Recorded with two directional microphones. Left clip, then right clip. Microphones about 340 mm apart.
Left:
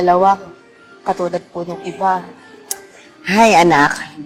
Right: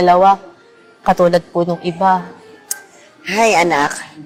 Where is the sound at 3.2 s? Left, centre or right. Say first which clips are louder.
Left 3 dB; left.